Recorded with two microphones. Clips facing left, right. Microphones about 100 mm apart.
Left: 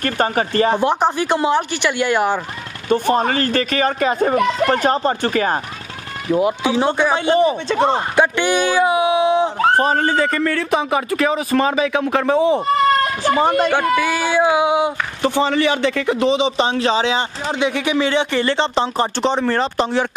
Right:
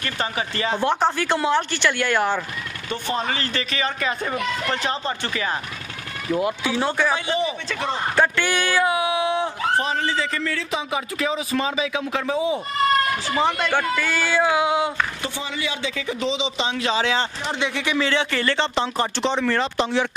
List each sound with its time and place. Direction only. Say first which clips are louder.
0.0 s speech: left 8 dB; 45° left (ahead or behind)
0.7 s speech: left 4 dB; 15° left (ahead or behind)
2.9 s speech: left 10 dB; 45° left (ahead or behind)
4.4 s speech: left 9 dB; 50° left (ahead or behind)
6.3 s speech: left 6 dB; 20° left (ahead or behind)
7.2 s speech: left 9 dB; 50° left (ahead or behind)
8.2 s speech: left 4 dB; 20° left (ahead or behind)
9.6 s speech: left 7 dB; 50° left (ahead or behind)
13.2 s speech: left 7 dB; 45° left (ahead or behind)
13.7 s speech: left 6 dB; 15° left (ahead or behind)
15.2 s speech: left 12 dB; 65° left (ahead or behind); by 19.0 s 25° left (ahead or behind)
19.2 s speech: left 3 dB; 40° left (ahead or behind)